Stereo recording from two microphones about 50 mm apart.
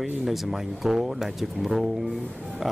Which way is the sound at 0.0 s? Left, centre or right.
Centre.